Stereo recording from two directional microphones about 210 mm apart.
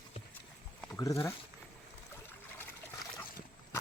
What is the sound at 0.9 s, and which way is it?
Speech, 15° left (ahead or behind).